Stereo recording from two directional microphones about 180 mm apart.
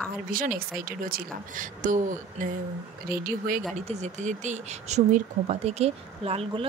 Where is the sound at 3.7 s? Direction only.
40° right (ahead or behind).